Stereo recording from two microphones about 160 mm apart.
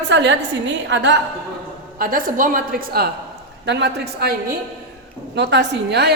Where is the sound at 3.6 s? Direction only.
90° right.